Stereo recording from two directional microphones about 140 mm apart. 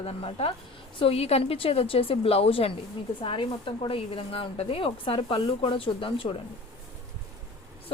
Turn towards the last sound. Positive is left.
turn(degrees=40)  # may be behind; listen again after turning